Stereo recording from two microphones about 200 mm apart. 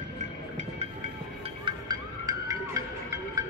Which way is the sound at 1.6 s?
20° right (ahead or behind).